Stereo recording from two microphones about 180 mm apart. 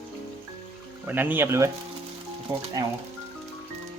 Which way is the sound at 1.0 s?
10° right (ahead or behind).